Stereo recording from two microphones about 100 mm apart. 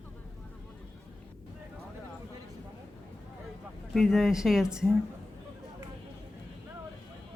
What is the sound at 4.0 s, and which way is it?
Speech, centre (ahead or behind).